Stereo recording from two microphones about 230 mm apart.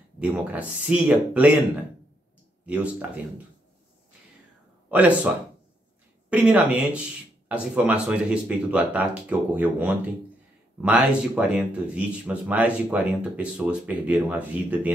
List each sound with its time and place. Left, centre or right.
0.2 s speech: centre
2.6 s speech: centre
4.9 s speech: centre
6.3 s speech: centre